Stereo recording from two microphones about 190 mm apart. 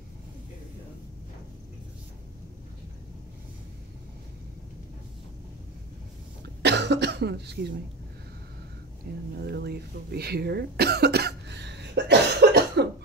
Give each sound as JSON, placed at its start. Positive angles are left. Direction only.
{"t": 6.4, "sound": "cough", "side_deg": -65}
{"t": 9.1, "sound": "speech", "side_deg": -55}